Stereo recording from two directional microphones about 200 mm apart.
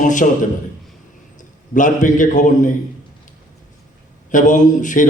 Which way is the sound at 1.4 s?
40° left (ahead or behind).